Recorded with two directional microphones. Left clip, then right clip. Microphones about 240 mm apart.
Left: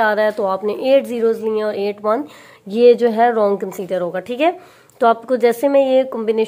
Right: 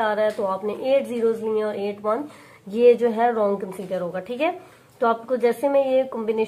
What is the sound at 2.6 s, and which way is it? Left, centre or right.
A woman's voice, left.